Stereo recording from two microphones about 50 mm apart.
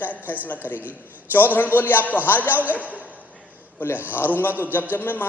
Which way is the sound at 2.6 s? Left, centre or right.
Right.